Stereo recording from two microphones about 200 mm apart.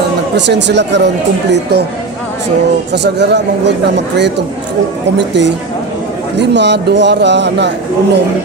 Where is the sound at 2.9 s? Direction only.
60° right (ahead or behind).